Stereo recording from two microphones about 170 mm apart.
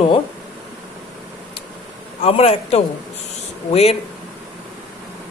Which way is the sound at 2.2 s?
35° left (ahead or behind).